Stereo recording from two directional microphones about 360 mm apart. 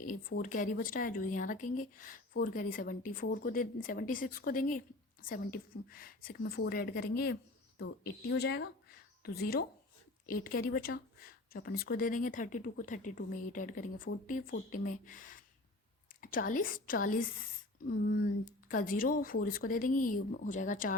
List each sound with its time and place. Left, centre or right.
0.0 s speech: left
18.7 s speech: left